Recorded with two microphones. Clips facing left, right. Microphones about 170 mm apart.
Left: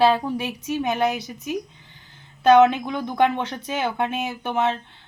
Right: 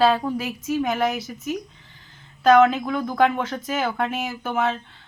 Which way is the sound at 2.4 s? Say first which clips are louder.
Left 1 dB; 25° left (ahead or behind).